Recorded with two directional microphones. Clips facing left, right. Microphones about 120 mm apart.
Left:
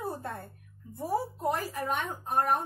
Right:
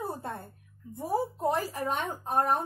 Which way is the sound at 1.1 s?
30° right (ahead or behind).